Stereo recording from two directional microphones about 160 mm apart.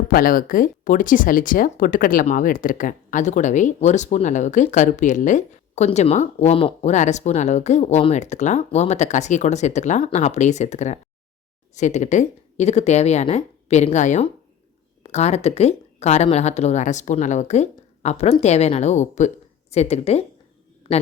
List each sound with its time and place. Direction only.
0.1 s a man's voice: 60° left (ahead or behind); by 21.0 s 35° left (ahead or behind)